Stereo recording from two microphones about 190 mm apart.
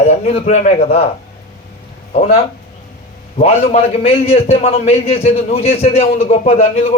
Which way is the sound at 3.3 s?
35° left (ahead or behind).